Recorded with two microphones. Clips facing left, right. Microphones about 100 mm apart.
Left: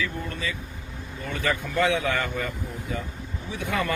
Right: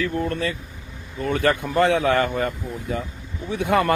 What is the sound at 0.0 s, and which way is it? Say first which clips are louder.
Speech: right 7 dB; 50° right (ahead or behind).